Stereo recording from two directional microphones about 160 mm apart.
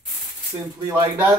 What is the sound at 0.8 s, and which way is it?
Speech, 15° right (ahead or behind).